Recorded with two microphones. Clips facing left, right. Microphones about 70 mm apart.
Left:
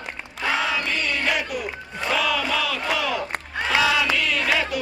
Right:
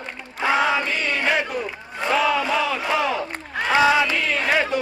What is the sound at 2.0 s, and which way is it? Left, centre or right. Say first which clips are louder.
Battle cry: right 3 dB; right.